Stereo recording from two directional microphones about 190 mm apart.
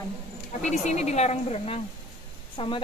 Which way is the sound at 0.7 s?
35° left (ahead or behind).